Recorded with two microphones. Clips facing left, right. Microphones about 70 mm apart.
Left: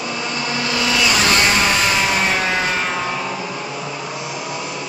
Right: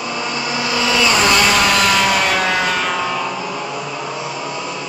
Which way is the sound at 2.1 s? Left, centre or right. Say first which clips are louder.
Right 2 dB; right.